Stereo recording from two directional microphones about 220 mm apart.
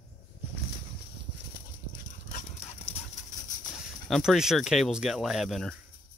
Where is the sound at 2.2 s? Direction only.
35° left (ahead or behind).